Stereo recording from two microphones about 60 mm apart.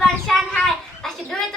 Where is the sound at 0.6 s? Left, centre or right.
Centre.